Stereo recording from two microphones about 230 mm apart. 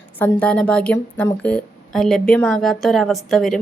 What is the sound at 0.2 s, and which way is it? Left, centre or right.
A woman's voice, centre.